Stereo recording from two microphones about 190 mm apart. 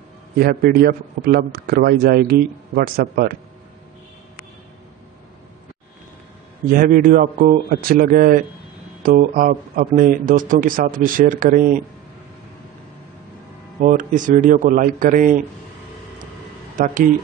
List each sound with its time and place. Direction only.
0.4 s a man's voice: 55° right (ahead or behind)
6.7 s a man's voice: 50° right (ahead or behind)
13.7 s a man's voice: 45° right (ahead or behind)
16.7 s a man's voice: 45° right (ahead or behind)